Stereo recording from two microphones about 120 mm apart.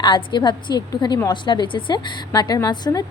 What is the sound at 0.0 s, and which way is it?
A woman's voice, 40° left (ahead or behind).